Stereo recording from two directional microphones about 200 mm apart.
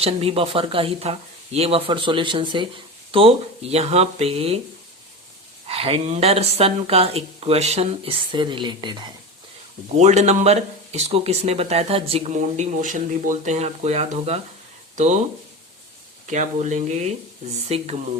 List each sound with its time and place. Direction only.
0.0 s speech: 30° right (ahead or behind)
5.6 s speech: 30° right (ahead or behind)
10.0 s speech: 35° right (ahead or behind)
16.2 s speech: 35° right (ahead or behind)